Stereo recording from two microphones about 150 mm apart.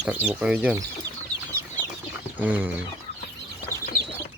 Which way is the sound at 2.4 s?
10° right (ahead or behind).